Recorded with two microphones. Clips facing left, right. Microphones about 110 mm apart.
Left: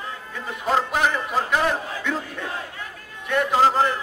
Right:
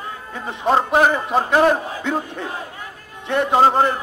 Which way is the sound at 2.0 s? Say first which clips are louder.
Right 4 dB; 25° right (ahead or behind).